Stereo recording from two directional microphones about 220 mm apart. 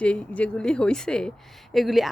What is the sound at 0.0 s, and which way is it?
Speech, 5° left (ahead or behind).